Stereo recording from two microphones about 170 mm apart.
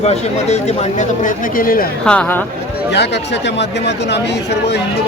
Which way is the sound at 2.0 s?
10° left (ahead or behind).